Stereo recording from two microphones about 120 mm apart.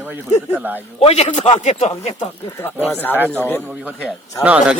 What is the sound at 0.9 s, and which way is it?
A man's voice, 60° left (ahead or behind).